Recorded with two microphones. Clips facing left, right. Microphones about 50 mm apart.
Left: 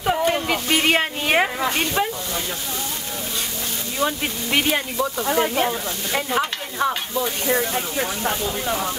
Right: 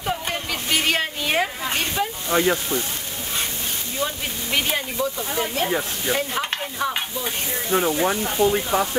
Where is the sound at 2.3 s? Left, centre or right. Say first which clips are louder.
Right 9 dB; right.